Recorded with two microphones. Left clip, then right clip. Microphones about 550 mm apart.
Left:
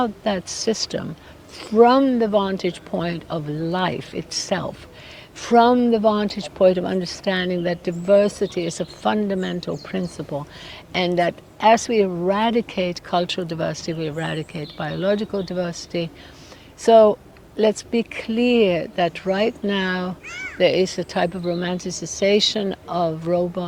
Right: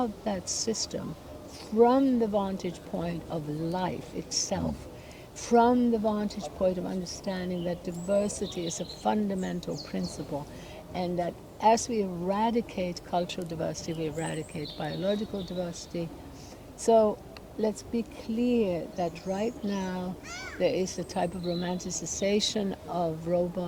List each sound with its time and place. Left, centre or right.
0.0 s speech: left